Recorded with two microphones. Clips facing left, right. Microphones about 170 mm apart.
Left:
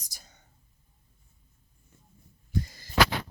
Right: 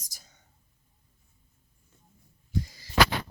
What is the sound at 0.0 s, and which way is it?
Whispering, 70° left (ahead or behind).